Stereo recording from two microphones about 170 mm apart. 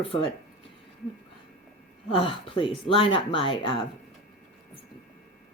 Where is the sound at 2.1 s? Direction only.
30° left (ahead or behind).